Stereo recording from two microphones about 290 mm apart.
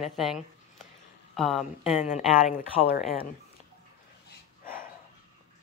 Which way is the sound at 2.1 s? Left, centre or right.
Left.